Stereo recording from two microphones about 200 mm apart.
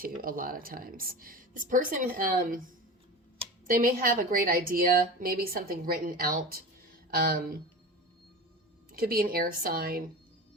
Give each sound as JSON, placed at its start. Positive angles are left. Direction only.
{"t": 0.0, "sound": "a woman's voice", "side_deg": -45}
{"t": 3.7, "sound": "a woman's voice", "side_deg": -45}
{"t": 8.9, "sound": "a woman's voice", "side_deg": -45}